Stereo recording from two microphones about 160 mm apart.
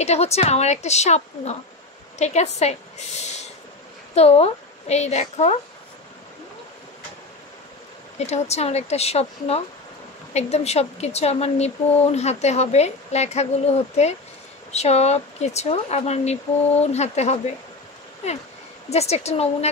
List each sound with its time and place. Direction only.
0.0 s speech: 40° left (ahead or behind)
4.1 s a woman's voice: 40° left (ahead or behind)
8.3 s speech: 40° left (ahead or behind)
18.9 s speech: 40° left (ahead or behind)